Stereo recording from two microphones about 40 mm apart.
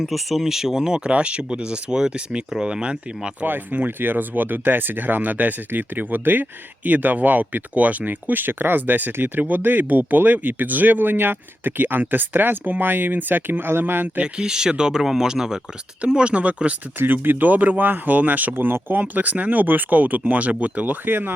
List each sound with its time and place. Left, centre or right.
0.0 s speech: centre; by 3.0 s right
3.4 s speech: right
14.4 s speech: centre
16.2 s speech: right
17.1 s speech: right
18.5 s speech: right
20.8 s speech: right